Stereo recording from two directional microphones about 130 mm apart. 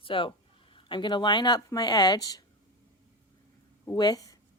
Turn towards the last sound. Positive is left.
turn(degrees=30)  # may be behind; listen again after turning